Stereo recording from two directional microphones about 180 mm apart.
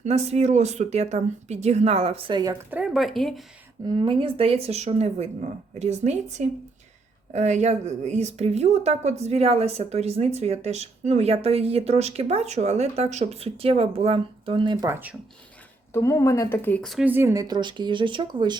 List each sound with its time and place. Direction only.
0.0 s speech: 35° right (ahead or behind); by 3.4 s centre (ahead or behind)
3.8 s speech: 25° right (ahead or behind)
14.8 s speech: 15° right (ahead or behind)
15.9 s a woman's voice: 15° left (ahead or behind)
17.1 s speech: 15° right (ahead or behind)